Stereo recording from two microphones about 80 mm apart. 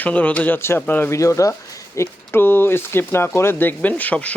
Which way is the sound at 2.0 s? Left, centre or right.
Left.